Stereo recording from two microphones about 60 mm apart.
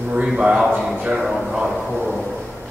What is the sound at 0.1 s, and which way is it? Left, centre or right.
A man's voice, centre.